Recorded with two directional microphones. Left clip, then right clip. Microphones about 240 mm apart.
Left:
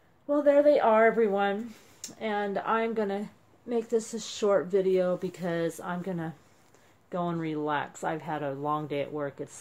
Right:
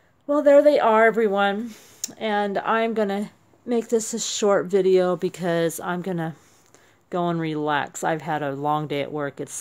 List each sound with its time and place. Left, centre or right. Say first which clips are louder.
0.3 s speech: right 6 dB; right